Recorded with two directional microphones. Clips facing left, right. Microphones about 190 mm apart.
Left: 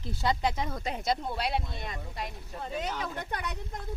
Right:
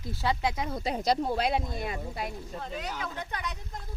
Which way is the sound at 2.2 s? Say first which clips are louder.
Right 2 dB; centre (ahead or behind).